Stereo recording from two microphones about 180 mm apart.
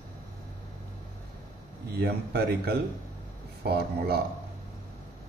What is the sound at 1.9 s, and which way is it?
Speech, 60° right (ahead or behind).